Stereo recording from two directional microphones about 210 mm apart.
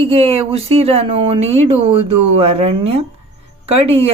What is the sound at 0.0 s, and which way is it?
A woman's voice, 25° right (ahead or behind).